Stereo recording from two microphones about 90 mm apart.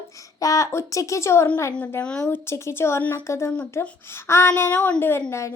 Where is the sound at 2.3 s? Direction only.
30° left (ahead or behind).